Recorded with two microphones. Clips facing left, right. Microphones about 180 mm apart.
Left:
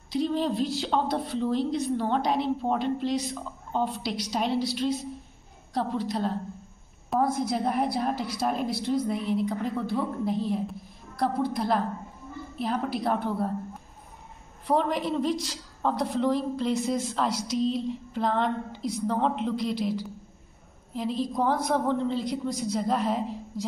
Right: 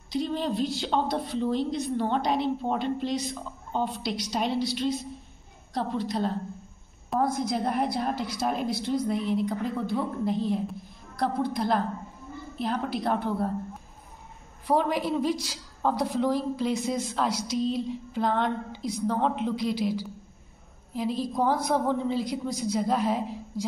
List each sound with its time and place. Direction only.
0.1 s a woman's voice: centre (ahead or behind)
14.7 s a woman's voice: 5° right (ahead or behind)